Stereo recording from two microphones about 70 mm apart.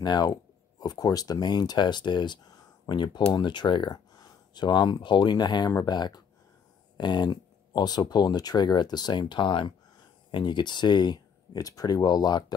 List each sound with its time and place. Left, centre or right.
0.0 s speech: left